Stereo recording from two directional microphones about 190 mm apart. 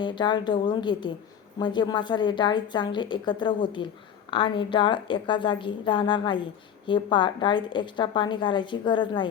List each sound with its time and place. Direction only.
0.0 s a woman's voice: 25° left (ahead or behind)